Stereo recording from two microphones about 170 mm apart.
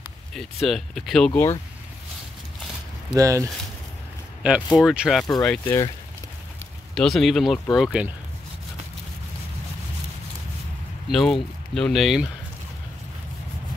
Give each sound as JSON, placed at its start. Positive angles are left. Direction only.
{"t": 0.3, "sound": "speech", "side_deg": 0}
{"t": 3.2, "sound": "speech", "side_deg": -20}
{"t": 4.4, "sound": "speech", "side_deg": -5}
{"t": 7.0, "sound": "speech", "side_deg": 0}
{"t": 11.1, "sound": "speech", "side_deg": 0}